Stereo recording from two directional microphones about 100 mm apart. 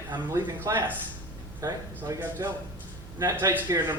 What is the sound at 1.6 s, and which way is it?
Speech, 35° right (ahead or behind).